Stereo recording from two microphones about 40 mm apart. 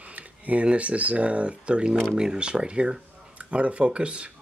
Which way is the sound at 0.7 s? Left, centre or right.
Right.